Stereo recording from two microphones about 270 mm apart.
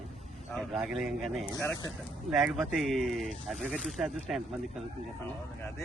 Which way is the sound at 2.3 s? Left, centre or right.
Centre.